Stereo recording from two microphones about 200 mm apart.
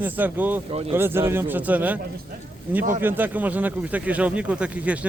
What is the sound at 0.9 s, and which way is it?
Speech, 10° right (ahead or behind).